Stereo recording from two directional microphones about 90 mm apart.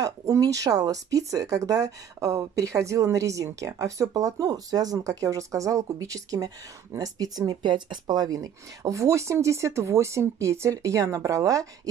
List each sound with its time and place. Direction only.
0.0 s speech: 40° right (ahead or behind)